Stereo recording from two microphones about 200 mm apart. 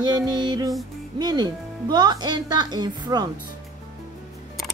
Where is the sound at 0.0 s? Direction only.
20° right (ahead or behind).